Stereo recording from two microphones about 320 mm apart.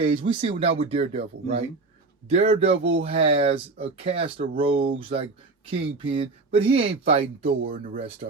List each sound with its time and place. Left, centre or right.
0.0 s speech: centre
7.5 s speech: right